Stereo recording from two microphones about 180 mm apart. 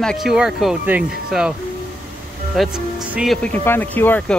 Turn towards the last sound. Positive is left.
turn(degrees=10)  # may be behind; listen again after turning